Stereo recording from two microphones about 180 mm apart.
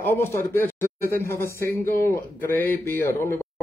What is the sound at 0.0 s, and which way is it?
Speech, 10° left (ahead or behind).